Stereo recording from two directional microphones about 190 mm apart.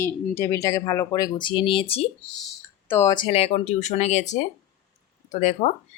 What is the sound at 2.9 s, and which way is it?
Speech, 15° left (ahead or behind).